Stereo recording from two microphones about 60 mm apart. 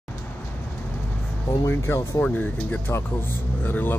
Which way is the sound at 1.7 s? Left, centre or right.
Left.